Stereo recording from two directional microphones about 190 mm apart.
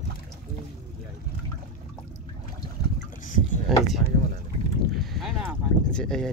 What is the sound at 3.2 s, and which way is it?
Rowboat, 45° left (ahead or behind).